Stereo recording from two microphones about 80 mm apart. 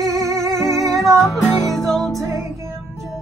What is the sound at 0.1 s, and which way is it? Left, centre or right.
Music, right.